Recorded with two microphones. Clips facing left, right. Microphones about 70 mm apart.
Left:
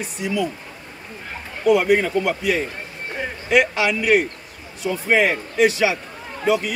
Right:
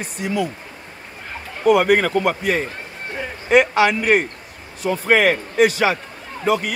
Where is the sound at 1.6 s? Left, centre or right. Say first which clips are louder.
Right 2 dB; right.